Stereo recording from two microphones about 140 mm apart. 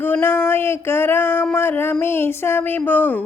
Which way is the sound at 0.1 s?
15° left (ahead or behind).